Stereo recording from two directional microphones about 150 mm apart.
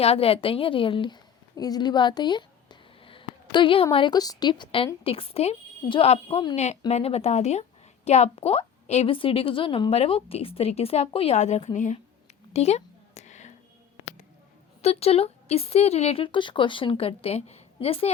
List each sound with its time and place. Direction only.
0.0 s a woman's voice: 40° left (ahead or behind)
6.6 s a woman's voice: 45° left (ahead or behind)
12.5 s a sound: 45° left (ahead or behind)
14.8 s speech: 45° left (ahead or behind)